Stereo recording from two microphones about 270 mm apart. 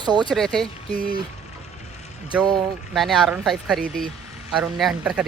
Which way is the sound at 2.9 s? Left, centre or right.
Centre.